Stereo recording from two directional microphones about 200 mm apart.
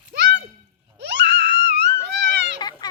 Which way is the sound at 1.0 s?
60° right (ahead or behind).